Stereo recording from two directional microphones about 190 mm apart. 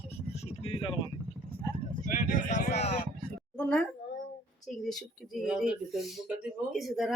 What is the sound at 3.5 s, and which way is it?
Speech, 5° left (ahead or behind).